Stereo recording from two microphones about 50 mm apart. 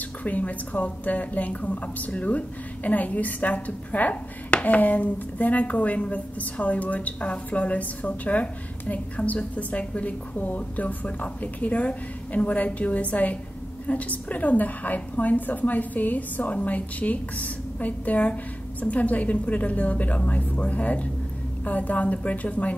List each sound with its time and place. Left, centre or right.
0.2 s a woman's voice: left